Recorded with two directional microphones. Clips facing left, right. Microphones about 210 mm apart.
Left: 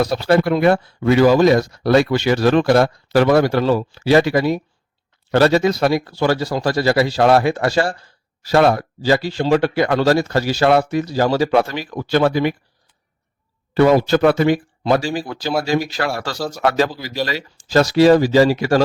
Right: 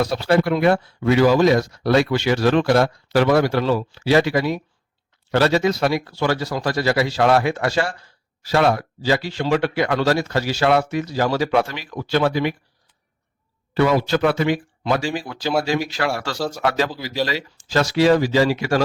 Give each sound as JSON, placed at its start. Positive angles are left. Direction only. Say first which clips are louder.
{"t": 0.0, "sound": "speech", "louder": "left 2 dB", "side_deg": 40}
{"t": 13.7, "sound": "speech", "louder": "left 5 dB", "side_deg": 45}